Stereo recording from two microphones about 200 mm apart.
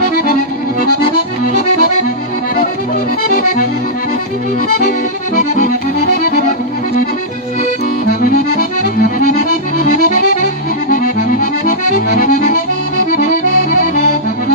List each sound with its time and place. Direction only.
0.2 s accordion: 45° left (ahead or behind)
5.4 s accordion: 40° left (ahead or behind)
5.9 s accordion: 50° left (ahead or behind)
8.2 s accordion: 45° left (ahead or behind)